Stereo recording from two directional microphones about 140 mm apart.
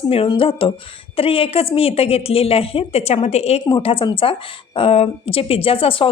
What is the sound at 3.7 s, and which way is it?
A woman's voice, 35° left (ahead or behind).